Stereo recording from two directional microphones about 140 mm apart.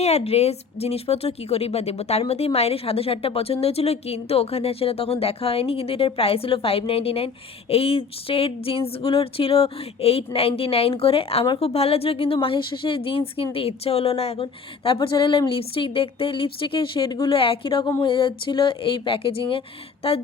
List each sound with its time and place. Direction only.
0.0 s speech: 50° left (ahead or behind)